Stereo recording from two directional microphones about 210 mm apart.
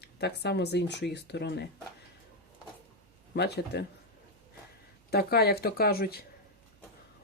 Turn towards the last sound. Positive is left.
turn(degrees=45)  # may be behind; listen again after turning